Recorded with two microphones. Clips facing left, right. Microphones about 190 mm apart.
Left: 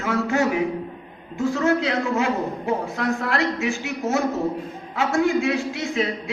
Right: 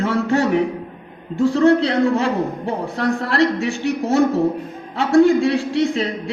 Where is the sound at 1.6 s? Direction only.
30° right (ahead or behind).